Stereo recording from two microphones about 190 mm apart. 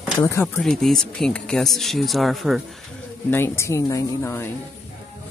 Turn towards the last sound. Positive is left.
turn(degrees=15)  # may be behind; listen again after turning